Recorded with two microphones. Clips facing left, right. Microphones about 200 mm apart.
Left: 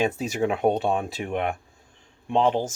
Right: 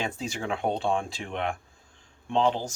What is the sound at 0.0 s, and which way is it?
Speech, 20° left (ahead or behind).